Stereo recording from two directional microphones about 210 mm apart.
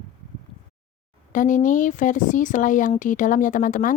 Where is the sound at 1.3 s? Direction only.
40° left (ahead or behind).